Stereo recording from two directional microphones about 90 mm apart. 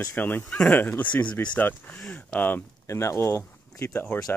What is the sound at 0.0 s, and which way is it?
Speech, 20° left (ahead or behind).